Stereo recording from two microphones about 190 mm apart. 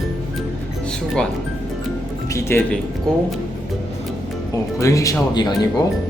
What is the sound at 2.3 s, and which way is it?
Speech, 15° left (ahead or behind).